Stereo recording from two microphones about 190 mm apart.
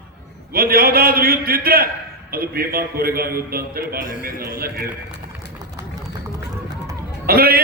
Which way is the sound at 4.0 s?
45° left (ahead or behind).